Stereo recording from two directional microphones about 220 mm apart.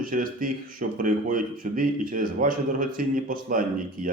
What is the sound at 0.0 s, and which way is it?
Speech, 40° right (ahead or behind).